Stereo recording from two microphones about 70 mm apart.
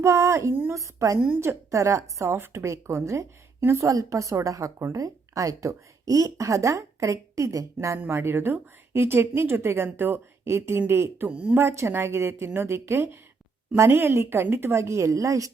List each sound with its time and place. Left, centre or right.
0.0 s speech: right
7.9 s speech: right
11.3 s speech: centre
11.5 s speech: right